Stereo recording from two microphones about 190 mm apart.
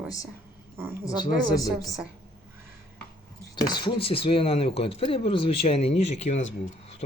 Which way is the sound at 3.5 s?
25° left (ahead or behind).